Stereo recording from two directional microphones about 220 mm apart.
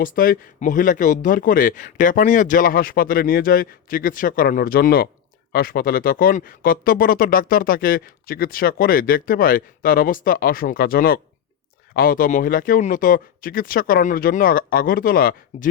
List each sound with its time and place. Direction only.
0.0 s speech: 40° left (ahead or behind)